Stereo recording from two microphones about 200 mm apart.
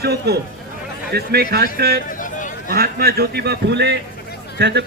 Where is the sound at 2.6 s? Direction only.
50° right (ahead or behind).